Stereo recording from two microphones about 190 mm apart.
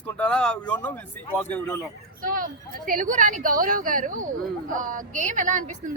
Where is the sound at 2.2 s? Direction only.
45° right (ahead or behind).